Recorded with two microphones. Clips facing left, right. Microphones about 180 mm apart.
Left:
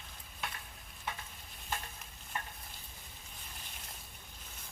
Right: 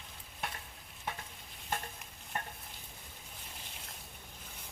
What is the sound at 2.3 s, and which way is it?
Stir, 55° right (ahead or behind).